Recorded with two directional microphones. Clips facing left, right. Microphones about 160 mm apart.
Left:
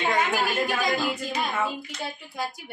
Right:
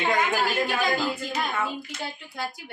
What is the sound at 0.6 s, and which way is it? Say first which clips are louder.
Speech: even; centre (ahead or behind).